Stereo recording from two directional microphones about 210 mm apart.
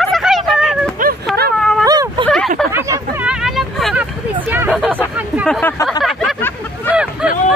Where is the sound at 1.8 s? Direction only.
20° right (ahead or behind).